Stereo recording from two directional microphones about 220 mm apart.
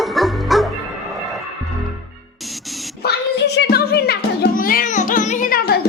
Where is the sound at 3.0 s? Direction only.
50° left (ahead or behind).